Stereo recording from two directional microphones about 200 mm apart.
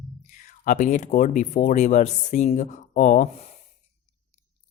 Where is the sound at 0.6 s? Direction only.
40° left (ahead or behind).